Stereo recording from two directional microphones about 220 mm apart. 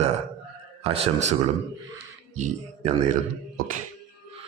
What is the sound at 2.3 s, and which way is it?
Speech, 30° right (ahead or behind).